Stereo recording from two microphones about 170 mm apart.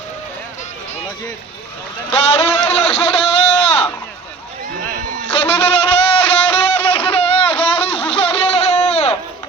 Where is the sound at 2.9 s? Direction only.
35° left (ahead or behind).